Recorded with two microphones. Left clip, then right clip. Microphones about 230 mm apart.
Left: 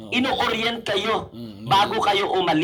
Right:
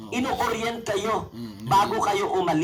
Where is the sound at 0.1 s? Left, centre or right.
Left.